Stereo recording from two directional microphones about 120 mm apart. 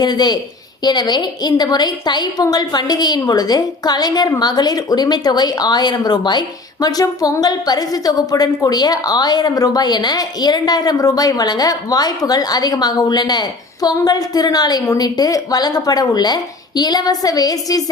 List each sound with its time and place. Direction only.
0.0 s a woman's voice: 35° left (ahead or behind)